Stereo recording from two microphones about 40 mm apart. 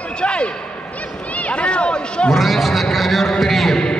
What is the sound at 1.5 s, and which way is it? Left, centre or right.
Speech, left.